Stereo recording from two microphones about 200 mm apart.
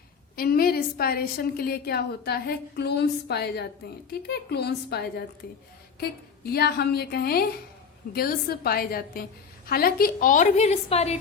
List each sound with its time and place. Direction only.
0.3 s a woman's voice: 50° left (ahead or behind); by 11.2 s 30° left (ahead or behind)